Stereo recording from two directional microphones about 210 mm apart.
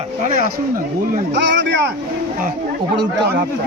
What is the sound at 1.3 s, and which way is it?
Speech, 60° right (ahead or behind).